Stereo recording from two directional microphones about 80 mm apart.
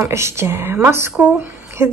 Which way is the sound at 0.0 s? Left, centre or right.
Right.